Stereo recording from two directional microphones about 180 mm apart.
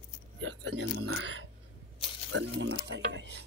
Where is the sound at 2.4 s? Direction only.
80° right.